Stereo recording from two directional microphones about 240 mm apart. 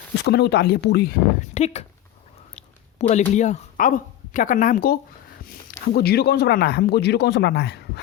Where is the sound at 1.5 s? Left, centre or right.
Left.